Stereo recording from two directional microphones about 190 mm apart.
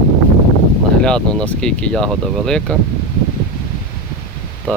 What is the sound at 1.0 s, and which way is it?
Speech, 5° left (ahead or behind).